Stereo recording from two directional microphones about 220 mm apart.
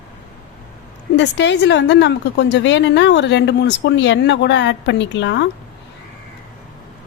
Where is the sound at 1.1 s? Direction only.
55° left (ahead or behind).